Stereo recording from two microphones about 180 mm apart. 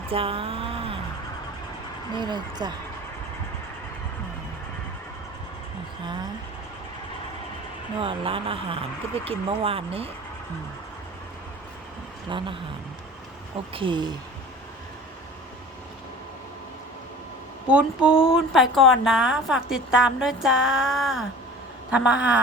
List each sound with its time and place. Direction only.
0.1 s a sound: 30° right (ahead or behind)
2.1 s speech: 25° right (ahead or behind)
7.9 s speech: 30° right (ahead or behind)
12.3 s speech: 25° right (ahead or behind)
13.7 s speech: 25° right (ahead or behind)
17.7 s a sound: 5° right (ahead or behind)
18.1 s speech: 30° left (ahead or behind)
18.5 s a woman's voice: centre (ahead or behind)